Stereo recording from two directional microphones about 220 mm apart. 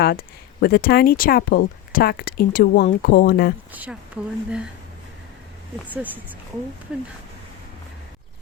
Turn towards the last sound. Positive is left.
turn(degrees=-5)  # may be behind; listen again after turning